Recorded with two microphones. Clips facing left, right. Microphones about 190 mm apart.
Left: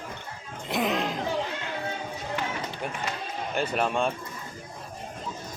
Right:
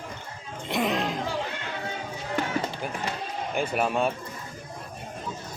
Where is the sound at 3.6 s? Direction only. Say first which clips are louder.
Right 1 dB; 5° right (ahead or behind).